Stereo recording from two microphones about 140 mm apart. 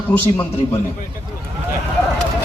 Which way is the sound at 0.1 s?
15° left (ahead or behind).